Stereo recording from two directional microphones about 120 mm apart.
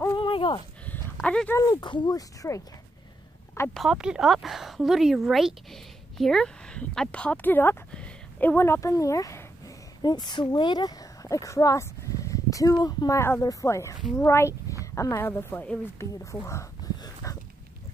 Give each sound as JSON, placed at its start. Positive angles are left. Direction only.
{"t": 0.1, "sound": "a sound", "side_deg": 45}
{"t": 1.2, "sound": "speech", "side_deg": 10}
{"t": 1.5, "sound": "speech", "side_deg": 30}
{"t": 3.7, "sound": "speech", "side_deg": -5}
{"t": 10.0, "sound": "a woman's voice", "side_deg": 35}
{"t": 16.0, "sound": "a sound", "side_deg": 25}